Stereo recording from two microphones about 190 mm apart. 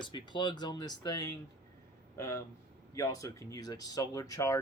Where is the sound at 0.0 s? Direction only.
25° left (ahead or behind).